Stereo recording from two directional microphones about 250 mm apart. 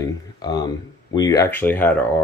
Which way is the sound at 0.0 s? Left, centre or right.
Centre.